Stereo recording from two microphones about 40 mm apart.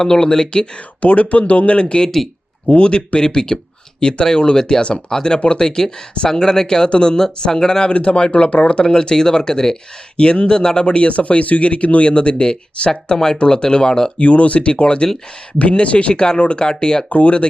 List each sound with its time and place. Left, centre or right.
0.0 s speech: centre
1.0 s speech: left
2.0 s speech: centre
2.6 s speech: left
7.9 s speech: left
14.2 s speech: left; by 17.1 s centre
17.1 s speech: left